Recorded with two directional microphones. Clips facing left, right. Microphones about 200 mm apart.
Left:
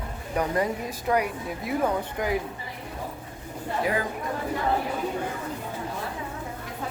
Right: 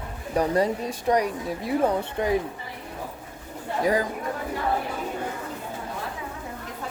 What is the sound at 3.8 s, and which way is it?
Speech, 40° right (ahead or behind).